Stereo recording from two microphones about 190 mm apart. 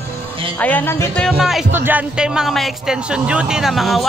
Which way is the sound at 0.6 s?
10° left (ahead or behind).